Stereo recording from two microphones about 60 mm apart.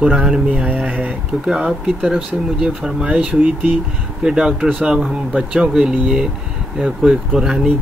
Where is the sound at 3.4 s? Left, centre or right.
Right.